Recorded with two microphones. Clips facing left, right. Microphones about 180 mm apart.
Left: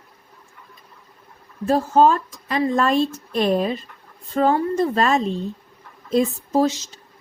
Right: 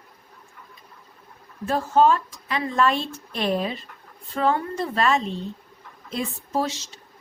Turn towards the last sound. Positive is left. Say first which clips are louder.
# left 7 dB
turn(degrees=40)  # may be behind; listen again after turning